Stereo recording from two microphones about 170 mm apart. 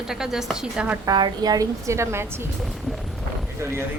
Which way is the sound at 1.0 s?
25° right (ahead or behind).